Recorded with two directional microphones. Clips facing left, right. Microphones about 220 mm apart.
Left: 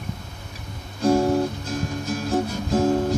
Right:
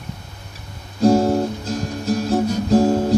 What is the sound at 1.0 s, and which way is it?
Guitar, 40° right (ahead or behind).